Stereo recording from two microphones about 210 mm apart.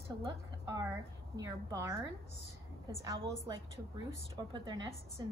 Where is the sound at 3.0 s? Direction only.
20° right (ahead or behind).